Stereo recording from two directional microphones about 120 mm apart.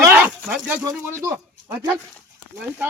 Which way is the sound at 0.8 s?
25° right (ahead or behind).